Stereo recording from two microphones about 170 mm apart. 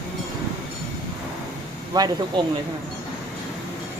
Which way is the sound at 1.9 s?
25° right (ahead or behind).